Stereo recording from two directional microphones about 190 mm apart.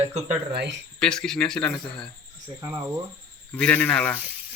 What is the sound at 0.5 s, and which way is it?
Speech, 60° right (ahead or behind).